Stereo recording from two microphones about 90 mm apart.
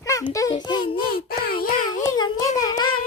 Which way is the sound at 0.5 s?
55° left (ahead or behind).